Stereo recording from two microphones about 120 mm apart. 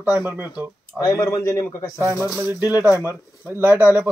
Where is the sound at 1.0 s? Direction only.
25° left (ahead or behind).